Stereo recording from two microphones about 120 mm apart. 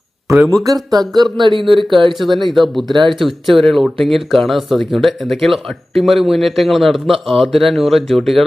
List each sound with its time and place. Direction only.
0.3 s speech: 25° right (ahead or behind); by 1.9 s 45° right (ahead or behind)
2.1 s speech: centre (ahead or behind)